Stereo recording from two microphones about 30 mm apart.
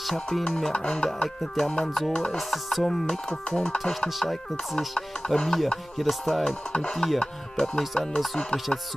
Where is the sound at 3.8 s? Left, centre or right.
Centre.